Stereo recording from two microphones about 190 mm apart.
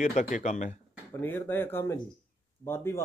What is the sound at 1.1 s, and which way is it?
Speech, 10° left (ahead or behind).